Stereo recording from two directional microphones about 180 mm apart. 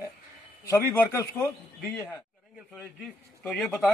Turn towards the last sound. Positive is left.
turn(degrees=0)  # may be behind; listen again after turning